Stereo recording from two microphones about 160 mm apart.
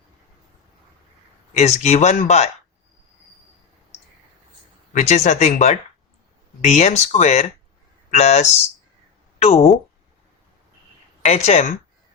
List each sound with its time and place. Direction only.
1.5 s speech: 45° left (ahead or behind)
4.9 s speech: 45° left (ahead or behind)
11.2 s speech: 45° left (ahead or behind)